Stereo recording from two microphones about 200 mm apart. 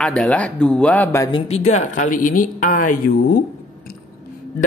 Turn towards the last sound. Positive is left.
turn(degrees=40)  # may be behind; listen again after turning